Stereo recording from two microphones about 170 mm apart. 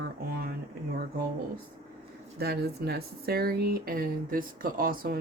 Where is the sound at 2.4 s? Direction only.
70° right (ahead or behind).